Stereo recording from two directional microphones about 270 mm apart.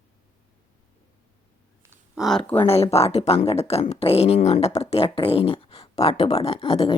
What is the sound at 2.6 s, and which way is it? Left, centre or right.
Speech, left.